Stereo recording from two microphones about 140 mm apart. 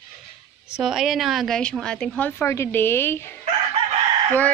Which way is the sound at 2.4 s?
20° left (ahead or behind).